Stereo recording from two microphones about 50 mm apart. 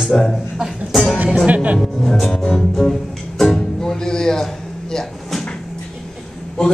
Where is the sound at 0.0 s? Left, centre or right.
Centre.